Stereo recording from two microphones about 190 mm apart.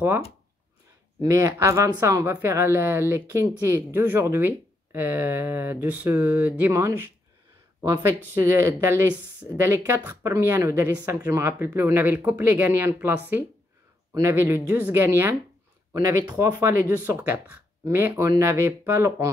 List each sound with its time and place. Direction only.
1.2 s speech: 15° right (ahead or behind)